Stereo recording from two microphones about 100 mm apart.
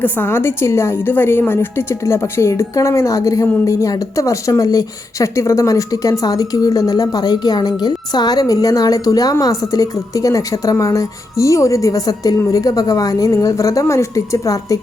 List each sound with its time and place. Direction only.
0.0 s a woman's voice: 20° left (ahead or behind)